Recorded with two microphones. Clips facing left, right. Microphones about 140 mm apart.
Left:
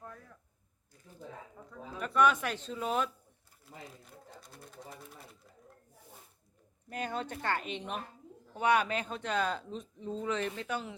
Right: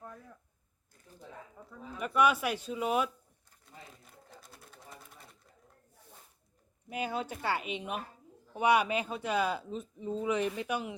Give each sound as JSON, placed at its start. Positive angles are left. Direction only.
{"t": 1.6, "sound": "speech", "side_deg": -5}
{"t": 4.0, "sound": "sewing machine", "side_deg": 0}
{"t": 6.9, "sound": "speech", "side_deg": -10}